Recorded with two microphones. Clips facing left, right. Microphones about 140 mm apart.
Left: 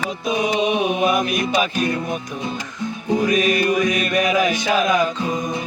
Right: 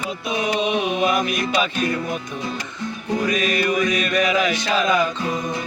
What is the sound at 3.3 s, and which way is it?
Music, 50° left (ahead or behind).